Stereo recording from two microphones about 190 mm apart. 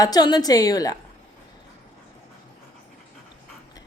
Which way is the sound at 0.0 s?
20° left (ahead or behind).